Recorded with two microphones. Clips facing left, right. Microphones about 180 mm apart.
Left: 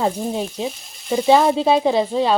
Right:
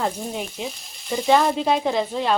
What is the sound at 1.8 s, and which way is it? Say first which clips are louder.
Speech: left 5 dB; 10° left (ahead or behind).